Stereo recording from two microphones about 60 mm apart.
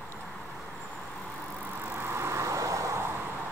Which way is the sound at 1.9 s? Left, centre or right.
Right.